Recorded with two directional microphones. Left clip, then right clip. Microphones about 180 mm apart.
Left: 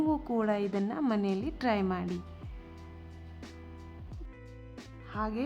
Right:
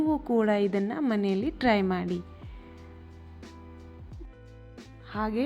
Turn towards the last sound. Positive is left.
turn(degrees=-10)  # may be behind; listen again after turning